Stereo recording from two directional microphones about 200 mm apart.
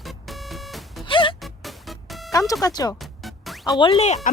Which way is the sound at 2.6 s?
20° left (ahead or behind).